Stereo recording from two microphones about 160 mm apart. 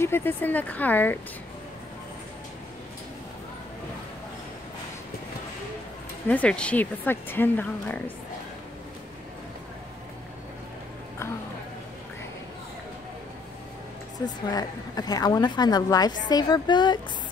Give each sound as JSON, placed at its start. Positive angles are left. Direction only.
{"t": 0.0, "sound": "speech", "side_deg": 15}
{"t": 6.2, "sound": "speech", "side_deg": 10}
{"t": 14.1, "sound": "a woman's voice", "side_deg": 25}